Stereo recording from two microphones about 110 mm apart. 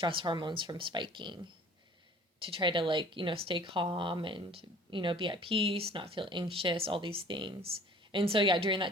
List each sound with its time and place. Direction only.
0.0 s speech: 50° right (ahead or behind)
2.5 s speech: 50° right (ahead or behind)